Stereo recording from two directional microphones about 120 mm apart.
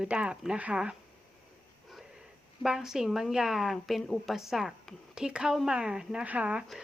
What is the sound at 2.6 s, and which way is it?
A woman's voice, 5° right (ahead or behind).